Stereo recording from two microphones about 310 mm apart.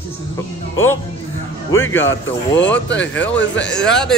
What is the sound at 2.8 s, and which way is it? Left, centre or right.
Speech, left.